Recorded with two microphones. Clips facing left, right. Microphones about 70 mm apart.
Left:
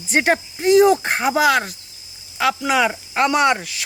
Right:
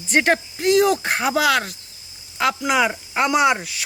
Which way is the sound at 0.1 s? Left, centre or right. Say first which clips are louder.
Even; centre.